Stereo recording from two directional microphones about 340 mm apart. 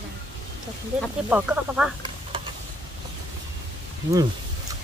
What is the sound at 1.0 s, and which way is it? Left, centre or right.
Speech, centre.